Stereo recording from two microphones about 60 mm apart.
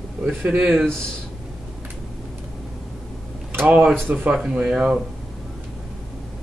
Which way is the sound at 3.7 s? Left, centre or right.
Right.